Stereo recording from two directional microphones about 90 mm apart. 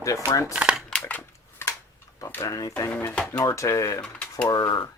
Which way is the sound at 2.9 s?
25° left (ahead or behind).